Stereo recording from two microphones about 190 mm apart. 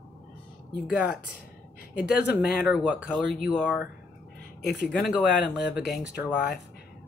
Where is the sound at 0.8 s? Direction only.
5° right (ahead or behind).